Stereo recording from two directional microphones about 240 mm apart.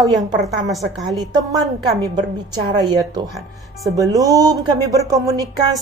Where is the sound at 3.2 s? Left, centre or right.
Centre.